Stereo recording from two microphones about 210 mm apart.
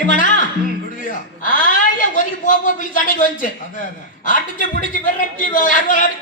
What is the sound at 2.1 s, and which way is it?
A man's voice, 40° left (ahead or behind).